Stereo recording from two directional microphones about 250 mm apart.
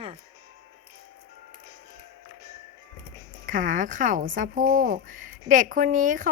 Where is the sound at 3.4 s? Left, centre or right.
Right.